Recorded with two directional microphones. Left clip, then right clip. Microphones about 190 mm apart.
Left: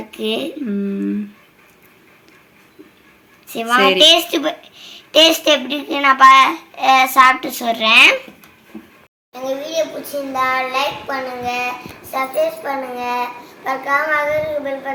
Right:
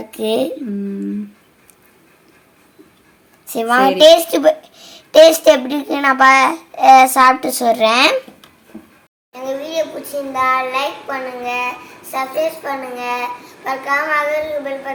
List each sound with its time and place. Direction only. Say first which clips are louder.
0.1 s a woman's voice: right 4 dB; 50° right (ahead or behind)
3.4 s a woman's voice: right 1 dB; 50° right (ahead or behind)
9.3 s a child's voice: even; 10° right (ahead or behind)